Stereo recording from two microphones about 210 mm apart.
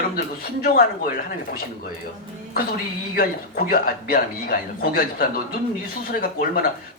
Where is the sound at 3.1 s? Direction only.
45° left (ahead or behind).